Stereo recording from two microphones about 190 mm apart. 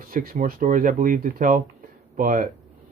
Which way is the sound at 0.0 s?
50° right (ahead or behind).